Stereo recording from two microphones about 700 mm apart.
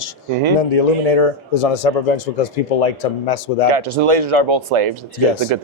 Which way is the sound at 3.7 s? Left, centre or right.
Right.